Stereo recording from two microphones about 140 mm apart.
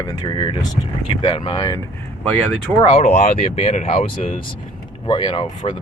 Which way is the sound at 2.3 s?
5° left (ahead or behind).